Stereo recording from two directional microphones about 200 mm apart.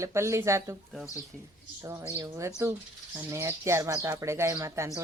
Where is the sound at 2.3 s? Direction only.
15° right (ahead or behind).